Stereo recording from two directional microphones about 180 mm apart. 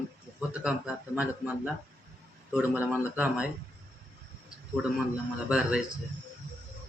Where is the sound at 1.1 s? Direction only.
10° right (ahead or behind).